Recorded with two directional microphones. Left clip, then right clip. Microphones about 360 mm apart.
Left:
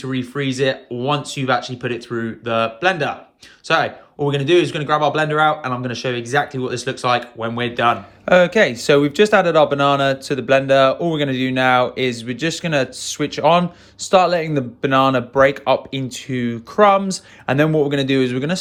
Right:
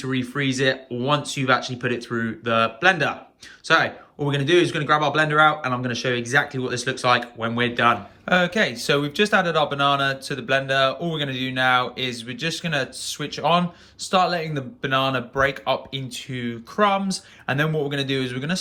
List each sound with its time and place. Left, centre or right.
0.0 s speech: centre
8.2 s speech: centre